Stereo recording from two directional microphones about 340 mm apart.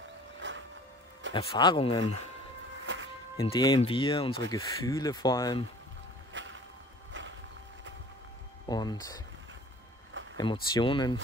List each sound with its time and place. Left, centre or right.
0.4 s music: right
1.3 s speech: centre
2.8 s music: right
3.3 s speech: centre
6.3 s music: right
8.6 s speech: centre
10.3 s speech: centre